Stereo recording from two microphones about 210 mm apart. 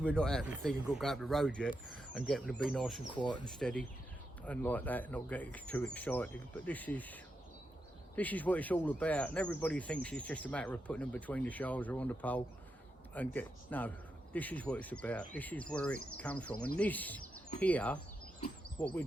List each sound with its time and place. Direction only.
0.0 s speech: 5° left (ahead or behind)
3.2 s speech: 20° left (ahead or behind)
3.4 s speech: 5° left (ahead or behind)